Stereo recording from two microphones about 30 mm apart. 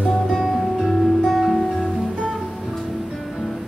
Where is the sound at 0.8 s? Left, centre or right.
Centre.